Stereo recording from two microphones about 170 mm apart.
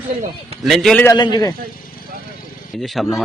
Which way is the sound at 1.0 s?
25° left (ahead or behind).